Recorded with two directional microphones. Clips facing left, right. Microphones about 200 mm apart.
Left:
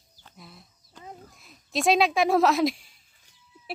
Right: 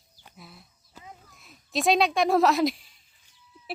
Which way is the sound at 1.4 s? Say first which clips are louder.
Even; centre (ahead or behind).